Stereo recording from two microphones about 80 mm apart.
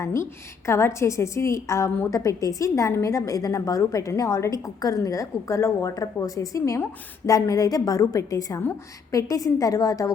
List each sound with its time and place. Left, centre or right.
0.0 s a woman's voice: left